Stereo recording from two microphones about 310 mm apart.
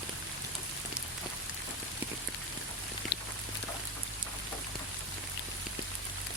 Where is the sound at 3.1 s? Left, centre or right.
Left.